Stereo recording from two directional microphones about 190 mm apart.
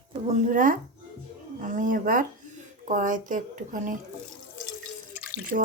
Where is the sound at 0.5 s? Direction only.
45° right (ahead or behind).